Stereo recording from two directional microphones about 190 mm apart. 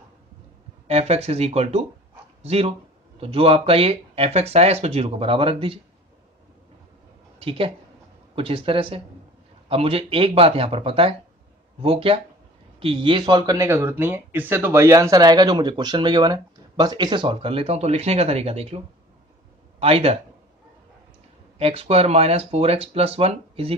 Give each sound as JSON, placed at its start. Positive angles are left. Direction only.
{"t": 0.8, "sound": "speech", "side_deg": -35}
{"t": 7.3, "sound": "speech", "side_deg": -30}
{"t": 19.8, "sound": "speech", "side_deg": -30}
{"t": 21.5, "sound": "speech", "side_deg": -30}